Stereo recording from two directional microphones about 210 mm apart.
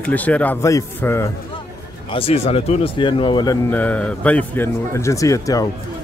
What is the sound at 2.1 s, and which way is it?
Speech, 30° left (ahead or behind).